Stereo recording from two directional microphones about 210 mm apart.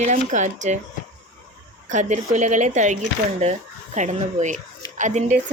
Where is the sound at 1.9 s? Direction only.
35° right (ahead or behind).